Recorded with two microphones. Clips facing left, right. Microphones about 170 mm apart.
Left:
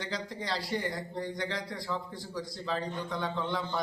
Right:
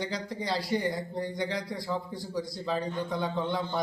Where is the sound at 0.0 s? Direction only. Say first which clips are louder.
Right 3 dB; centre (ahead or behind).